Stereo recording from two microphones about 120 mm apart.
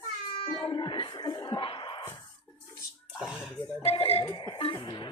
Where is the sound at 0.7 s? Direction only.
40° left (ahead or behind).